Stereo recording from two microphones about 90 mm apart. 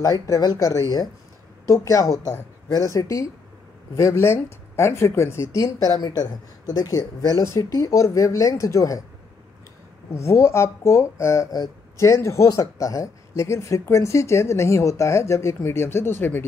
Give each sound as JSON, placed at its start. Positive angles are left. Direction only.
{"t": 0.0, "sound": "speech", "side_deg": 40}
{"t": 10.1, "sound": "speech", "side_deg": 30}